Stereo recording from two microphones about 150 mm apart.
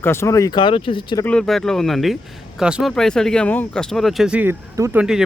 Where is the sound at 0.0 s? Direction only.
15° left (ahead or behind); by 1.2 s 35° left (ahead or behind).